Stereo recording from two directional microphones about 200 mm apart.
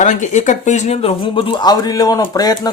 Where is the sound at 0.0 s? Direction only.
35° left (ahead or behind).